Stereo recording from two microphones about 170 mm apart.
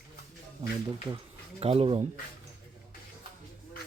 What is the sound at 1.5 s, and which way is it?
Speech, 35° right (ahead or behind).